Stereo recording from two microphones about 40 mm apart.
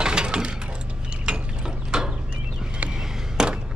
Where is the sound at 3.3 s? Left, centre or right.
Right.